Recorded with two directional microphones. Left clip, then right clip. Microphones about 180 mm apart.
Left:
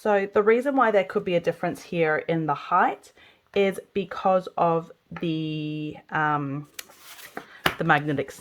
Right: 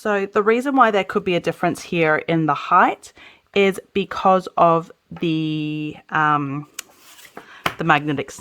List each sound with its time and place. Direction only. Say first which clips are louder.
0.0 s speech: right 2 dB; 35° right (ahead or behind)